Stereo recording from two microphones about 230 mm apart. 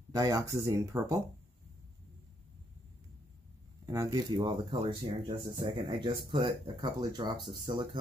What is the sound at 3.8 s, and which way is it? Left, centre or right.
Speech, centre.